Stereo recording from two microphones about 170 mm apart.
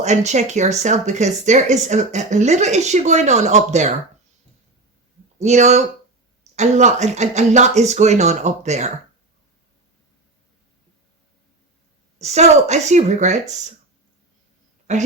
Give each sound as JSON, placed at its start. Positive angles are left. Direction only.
{"t": 0.0, "sound": "speech", "side_deg": -45}
{"t": 5.4, "sound": "speech", "side_deg": -45}
{"t": 12.2, "sound": "speech", "side_deg": -40}